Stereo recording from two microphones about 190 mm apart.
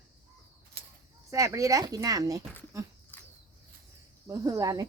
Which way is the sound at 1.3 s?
15° right (ahead or behind).